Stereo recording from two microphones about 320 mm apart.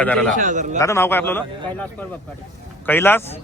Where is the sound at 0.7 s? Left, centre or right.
Centre.